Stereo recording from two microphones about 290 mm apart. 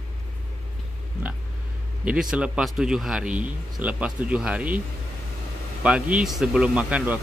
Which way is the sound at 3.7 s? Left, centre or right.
Centre.